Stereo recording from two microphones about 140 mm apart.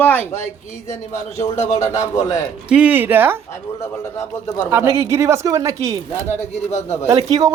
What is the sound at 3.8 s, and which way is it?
Speech, 20° left (ahead or behind).